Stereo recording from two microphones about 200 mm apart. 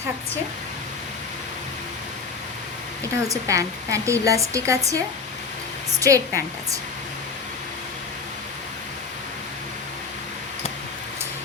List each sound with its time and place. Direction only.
3.2 s speech: 15° right (ahead or behind)
6.0 s speech: 15° right (ahead or behind)